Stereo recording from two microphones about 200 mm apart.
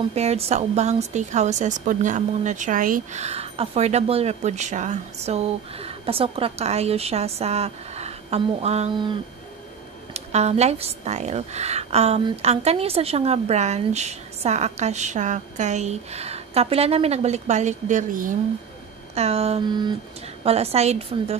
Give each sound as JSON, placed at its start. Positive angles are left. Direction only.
{"t": 0.1, "sound": "a woman's voice", "side_deg": -30}
{"t": 10.1, "sound": "a woman's voice", "side_deg": -30}